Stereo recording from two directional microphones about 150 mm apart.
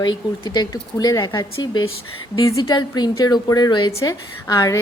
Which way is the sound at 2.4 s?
20° left (ahead or behind).